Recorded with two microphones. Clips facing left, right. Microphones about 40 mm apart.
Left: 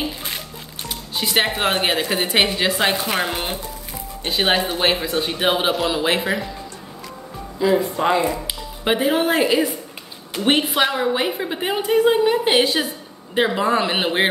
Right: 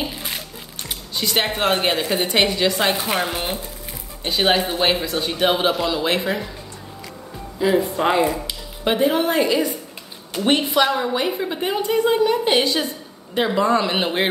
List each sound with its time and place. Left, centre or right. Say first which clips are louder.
1.1 s a woman's voice: left 1 dB; centre
7.6 s speech: even; centre
8.5 s music: left 1 dB; centre
9.3 s a woman's voice: left 1 dB; centre